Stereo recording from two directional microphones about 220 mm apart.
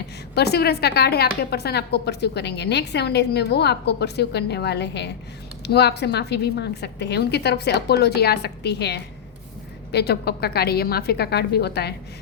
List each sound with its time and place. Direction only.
0.3 s a woman's voice: 45° left (ahead or behind)